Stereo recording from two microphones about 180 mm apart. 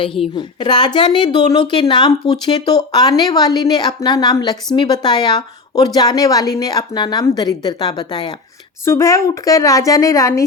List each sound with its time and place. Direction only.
0.0 s a woman's voice: 30° left (ahead or behind)